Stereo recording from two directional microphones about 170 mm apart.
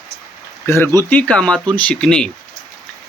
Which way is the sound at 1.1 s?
5° left (ahead or behind).